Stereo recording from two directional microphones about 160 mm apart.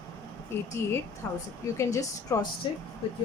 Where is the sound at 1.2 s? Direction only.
15° left (ahead or behind).